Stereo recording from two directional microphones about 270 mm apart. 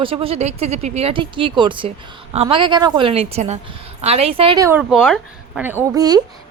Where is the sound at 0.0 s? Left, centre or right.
Centre.